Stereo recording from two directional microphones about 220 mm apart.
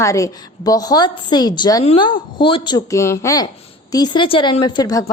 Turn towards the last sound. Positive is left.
turn(degrees=15)  # may be behind; listen again after turning